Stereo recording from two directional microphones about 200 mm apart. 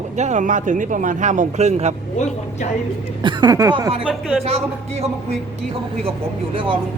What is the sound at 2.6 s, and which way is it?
Speech, 35° left (ahead or behind).